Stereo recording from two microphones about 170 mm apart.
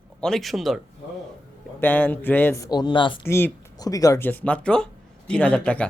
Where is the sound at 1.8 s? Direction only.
10° left (ahead or behind); by 3.1 s 30° left (ahead or behind).